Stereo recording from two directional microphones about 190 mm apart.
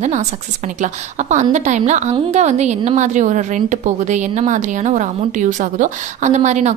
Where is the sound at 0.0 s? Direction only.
40° right (ahead or behind).